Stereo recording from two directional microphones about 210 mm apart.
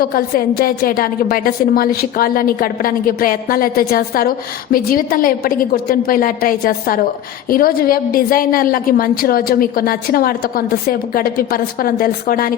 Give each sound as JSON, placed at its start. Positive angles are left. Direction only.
{"t": 0.0, "sound": "a woman's voice", "side_deg": 45}